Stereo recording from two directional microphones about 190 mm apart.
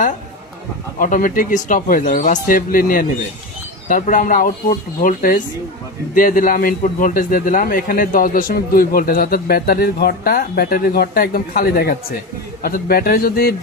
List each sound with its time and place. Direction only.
0.9 s a man's voice: 45° left (ahead or behind)